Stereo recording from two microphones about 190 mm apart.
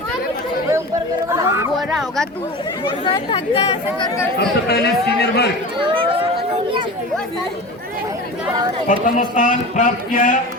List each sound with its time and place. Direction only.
1.3 s chatter: 15° right (ahead or behind)
1.9 s a sound: centre (ahead or behind)
3.0 s speech: 25° left (ahead or behind)
4.7 s a man's voice: 60° left (ahead or behind)
5.8 s a sound: 30° right (ahead or behind)
8.9 s speech: 40° left (ahead or behind)